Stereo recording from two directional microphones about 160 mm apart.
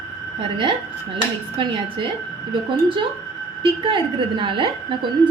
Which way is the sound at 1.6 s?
30° right (ahead or behind).